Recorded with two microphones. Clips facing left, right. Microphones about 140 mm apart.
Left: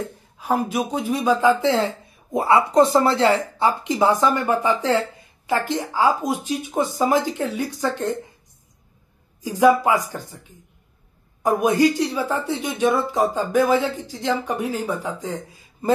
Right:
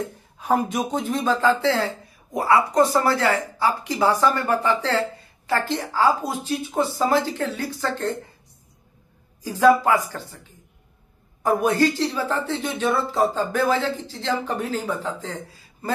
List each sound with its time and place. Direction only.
0.4 s speech: centre (ahead or behind)
9.4 s speech: 15° left (ahead or behind)
11.4 s speech: 15° left (ahead or behind)